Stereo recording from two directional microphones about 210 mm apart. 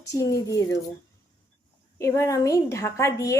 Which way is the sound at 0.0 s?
15° left (ahead or behind).